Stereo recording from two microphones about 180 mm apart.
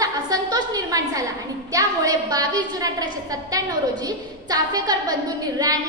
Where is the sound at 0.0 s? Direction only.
20° right (ahead or behind).